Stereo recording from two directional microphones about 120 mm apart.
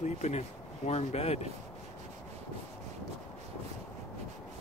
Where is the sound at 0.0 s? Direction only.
75° left (ahead or behind).